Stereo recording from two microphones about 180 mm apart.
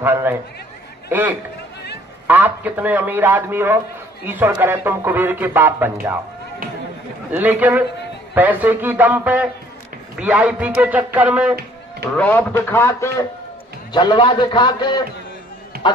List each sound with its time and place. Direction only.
0.0 s a man's voice: 10° right (ahead or behind)
7.3 s a man's voice: 10° right (ahead or behind)
12.1 s a man's voice: 10° left (ahead or behind)
13.9 s a man's voice: 25° left (ahead or behind)